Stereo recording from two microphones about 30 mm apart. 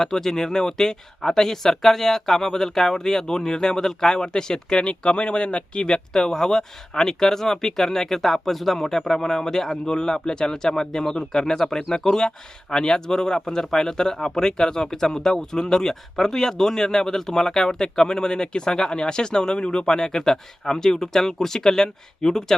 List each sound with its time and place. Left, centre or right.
0.0 s speech: centre
4.8 s speech: left
6.3 s speech: centre
8.2 s speech: centre